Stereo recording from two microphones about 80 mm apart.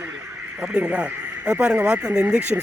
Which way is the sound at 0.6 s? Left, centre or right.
Centre.